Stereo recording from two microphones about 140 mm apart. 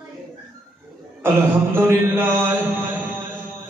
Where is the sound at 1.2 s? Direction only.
15° right (ahead or behind).